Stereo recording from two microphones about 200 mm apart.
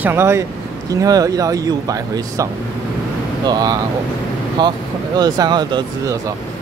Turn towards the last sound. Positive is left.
turn(degrees=-20)  # may be behind; listen again after turning